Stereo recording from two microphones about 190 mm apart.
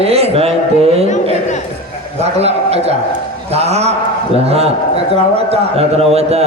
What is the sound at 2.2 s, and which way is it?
A man's voice, 35° right (ahead or behind).